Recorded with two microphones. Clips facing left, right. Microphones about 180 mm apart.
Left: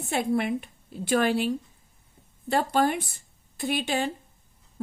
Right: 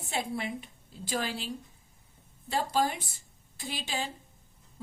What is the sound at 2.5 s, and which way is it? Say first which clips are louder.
A woman's voice: left 5 dB; 60° left (ahead or behind).